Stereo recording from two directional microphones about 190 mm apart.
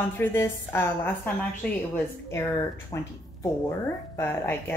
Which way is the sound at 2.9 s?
20° left (ahead or behind).